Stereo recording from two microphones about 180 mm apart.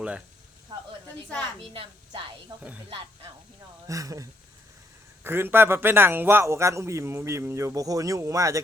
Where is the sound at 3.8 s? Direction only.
20° right (ahead or behind).